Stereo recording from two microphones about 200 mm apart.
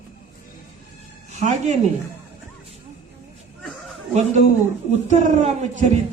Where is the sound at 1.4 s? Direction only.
35° right (ahead or behind).